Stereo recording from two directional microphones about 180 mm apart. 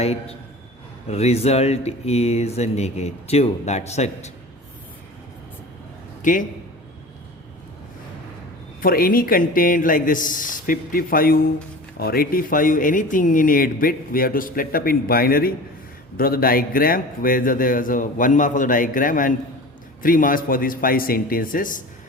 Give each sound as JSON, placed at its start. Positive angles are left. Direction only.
{"t": 0.0, "sound": "speech", "side_deg": 35}
{"t": 6.2, "sound": "speech", "side_deg": 45}
{"t": 8.8, "sound": "speech", "side_deg": 50}